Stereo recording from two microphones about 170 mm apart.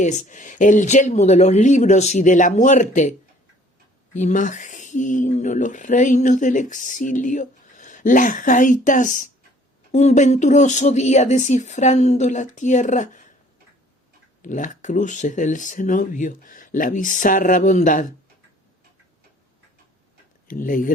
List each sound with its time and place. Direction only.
0.0 s speech: 45° left (ahead or behind)
14.4 s speech: 45° left (ahead or behind)
20.5 s speech: 50° left (ahead or behind)